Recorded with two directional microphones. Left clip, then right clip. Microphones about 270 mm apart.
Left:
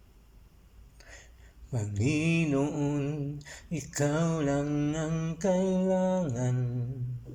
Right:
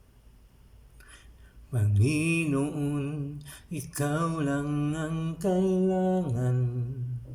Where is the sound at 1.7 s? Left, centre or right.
Centre.